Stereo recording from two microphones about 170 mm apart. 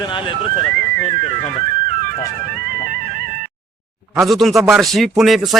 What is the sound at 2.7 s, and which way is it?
Music, 55° right (ahead or behind).